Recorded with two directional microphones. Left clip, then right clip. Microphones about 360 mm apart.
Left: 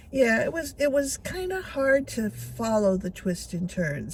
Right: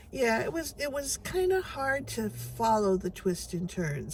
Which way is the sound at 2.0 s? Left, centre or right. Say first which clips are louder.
Left 3 dB; centre.